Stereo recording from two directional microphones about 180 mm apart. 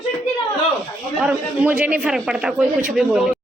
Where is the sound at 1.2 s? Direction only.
5° right (ahead or behind).